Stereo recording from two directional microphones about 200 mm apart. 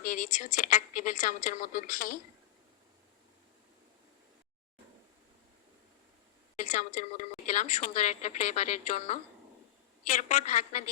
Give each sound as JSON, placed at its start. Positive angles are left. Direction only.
{"t": 0.0, "sound": "a woman's voice", "side_deg": 40}
{"t": 6.7, "sound": "a woman's voice", "side_deg": 35}
{"t": 10.2, "sound": "a woman's voice", "side_deg": 35}